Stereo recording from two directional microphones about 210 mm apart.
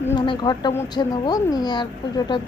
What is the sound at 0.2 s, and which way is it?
A woman's voice, 20° left (ahead or behind).